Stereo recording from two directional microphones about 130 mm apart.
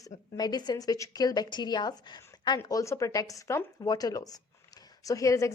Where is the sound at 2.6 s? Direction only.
25° left (ahead or behind).